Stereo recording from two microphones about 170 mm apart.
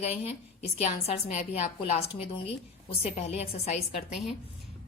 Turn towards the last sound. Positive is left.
turn(degrees=40)  # may be behind; listen again after turning